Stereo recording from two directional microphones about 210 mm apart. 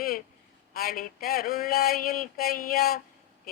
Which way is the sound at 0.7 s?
45° left (ahead or behind).